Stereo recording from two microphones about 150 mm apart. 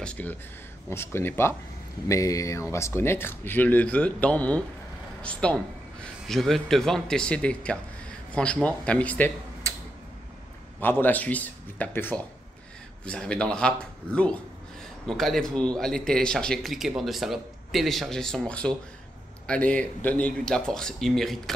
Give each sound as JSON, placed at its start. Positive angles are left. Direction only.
{"t": 0.0, "sound": "a man's voice", "side_deg": 10}
{"t": 10.8, "sound": "a man's voice", "side_deg": 15}